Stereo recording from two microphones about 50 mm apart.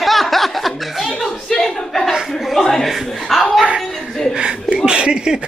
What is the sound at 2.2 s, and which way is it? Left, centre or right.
Chuckle, centre.